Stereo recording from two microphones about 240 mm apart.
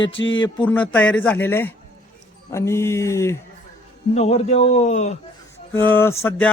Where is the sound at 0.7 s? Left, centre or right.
Centre.